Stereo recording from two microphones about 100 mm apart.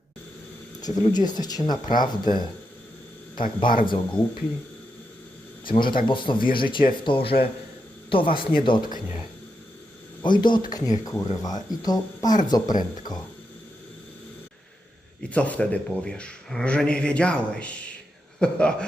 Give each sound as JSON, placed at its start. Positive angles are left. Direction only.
{"t": 0.8, "sound": "speech", "side_deg": 40}
{"t": 3.3, "sound": "speech", "side_deg": 55}
{"t": 5.6, "sound": "speech", "side_deg": 55}
{"t": 10.2, "sound": "speech", "side_deg": 50}
{"t": 10.7, "sound": "speech", "side_deg": 40}
{"t": 15.2, "sound": "speech", "side_deg": 15}